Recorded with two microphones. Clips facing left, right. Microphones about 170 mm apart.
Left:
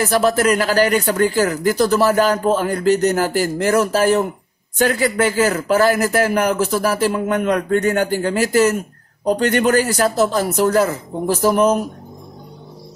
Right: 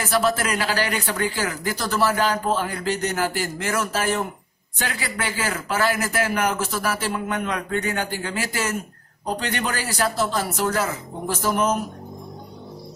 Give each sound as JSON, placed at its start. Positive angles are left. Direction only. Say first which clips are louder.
{"t": 0.0, "sound": "a man's voice", "louder": "left 6 dB", "side_deg": 40}